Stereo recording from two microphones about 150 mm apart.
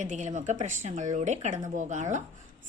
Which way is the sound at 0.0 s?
55° right (ahead or behind).